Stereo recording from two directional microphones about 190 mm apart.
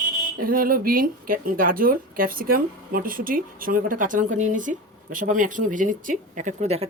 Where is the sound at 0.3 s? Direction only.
50° right (ahead or behind).